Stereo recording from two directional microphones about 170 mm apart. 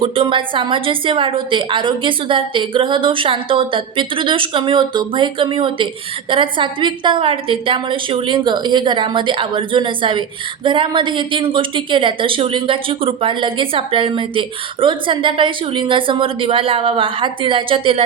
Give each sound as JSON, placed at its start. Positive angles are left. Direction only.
{"t": 0.0, "sound": "a woman's voice", "side_deg": -30}